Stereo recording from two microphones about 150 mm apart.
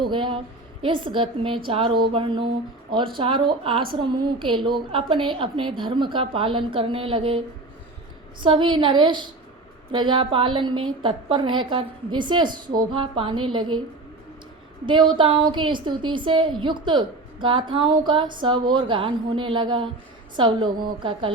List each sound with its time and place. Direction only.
0.0 s a woman's voice: 35° right (ahead or behind)
14.8 s a woman's voice: 30° right (ahead or behind)